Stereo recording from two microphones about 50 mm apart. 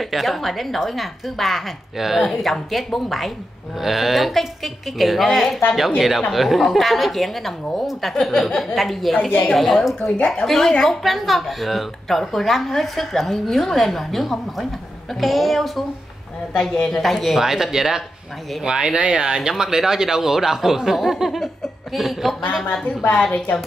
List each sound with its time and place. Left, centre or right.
0.0 s a woman's voice: centre
16.8 s a woman's voice: centre
22.8 s a woman's voice: left